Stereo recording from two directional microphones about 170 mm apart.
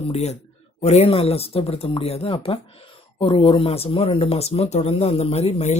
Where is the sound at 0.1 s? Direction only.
40° left (ahead or behind).